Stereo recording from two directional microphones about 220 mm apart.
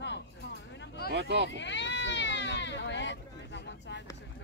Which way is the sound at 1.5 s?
55° left (ahead or behind).